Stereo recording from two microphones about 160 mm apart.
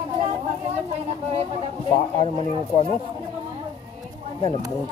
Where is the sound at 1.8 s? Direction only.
30° left (ahead or behind).